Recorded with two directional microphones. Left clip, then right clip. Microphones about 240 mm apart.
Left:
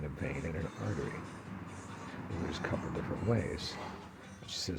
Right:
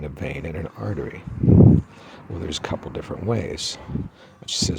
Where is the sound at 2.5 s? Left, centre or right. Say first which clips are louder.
Right 10 dB; right.